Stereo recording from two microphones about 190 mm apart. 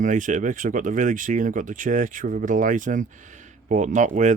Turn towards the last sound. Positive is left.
turn(degrees=-40)  # may be behind; listen again after turning